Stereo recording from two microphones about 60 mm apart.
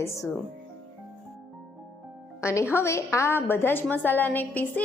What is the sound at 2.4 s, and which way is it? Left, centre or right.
A woman's voice, left.